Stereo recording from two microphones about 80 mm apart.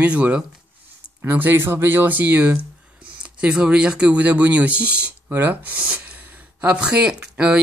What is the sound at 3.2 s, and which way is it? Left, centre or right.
Speech, centre.